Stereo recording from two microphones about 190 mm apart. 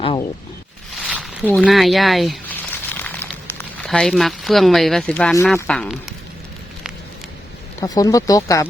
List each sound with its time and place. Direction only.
1.0 s zipper: 5° right (ahead or behind)
1.5 s speech: 5° left (ahead or behind)
7.8 s speech: 20° left (ahead or behind)